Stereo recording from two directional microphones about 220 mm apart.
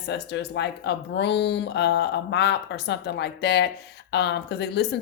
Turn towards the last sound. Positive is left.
turn(degrees=50)  # may be behind; listen again after turning